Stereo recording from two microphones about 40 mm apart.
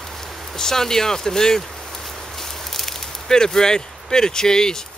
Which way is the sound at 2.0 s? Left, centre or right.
Centre.